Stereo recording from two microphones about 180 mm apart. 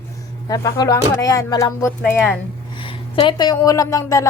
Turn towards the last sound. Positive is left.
turn(degrees=15)  # may be behind; listen again after turning